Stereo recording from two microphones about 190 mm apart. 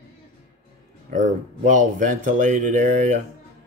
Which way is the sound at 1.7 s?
40° right (ahead or behind).